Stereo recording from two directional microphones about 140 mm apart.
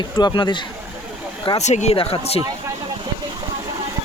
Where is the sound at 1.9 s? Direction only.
45° left (ahead or behind).